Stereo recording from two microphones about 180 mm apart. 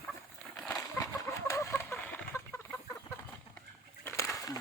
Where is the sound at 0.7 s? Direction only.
15° left (ahead or behind).